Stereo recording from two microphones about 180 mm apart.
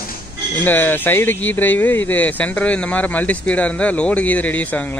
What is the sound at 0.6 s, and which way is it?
Speech, 10° left (ahead or behind).